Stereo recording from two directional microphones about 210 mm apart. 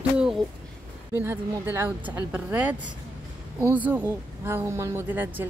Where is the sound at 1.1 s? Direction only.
10° right (ahead or behind).